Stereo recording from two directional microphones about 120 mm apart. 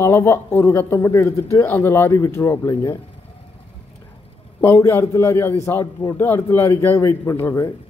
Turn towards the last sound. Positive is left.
turn(degrees=25)  # may be behind; listen again after turning